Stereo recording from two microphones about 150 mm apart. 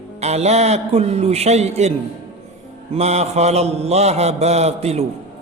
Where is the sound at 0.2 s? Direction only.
45° right (ahead or behind).